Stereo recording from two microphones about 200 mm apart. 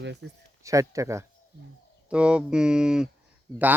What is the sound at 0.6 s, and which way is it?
Speech, 15° right (ahead or behind).